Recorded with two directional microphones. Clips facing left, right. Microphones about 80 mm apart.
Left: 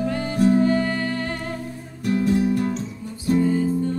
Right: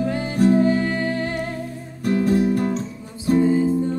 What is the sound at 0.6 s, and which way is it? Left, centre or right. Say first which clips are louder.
Music: right 1 dB; centre.